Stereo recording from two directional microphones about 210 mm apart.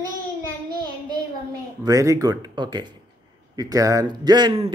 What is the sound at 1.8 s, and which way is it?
Speech, 15° right (ahead or behind).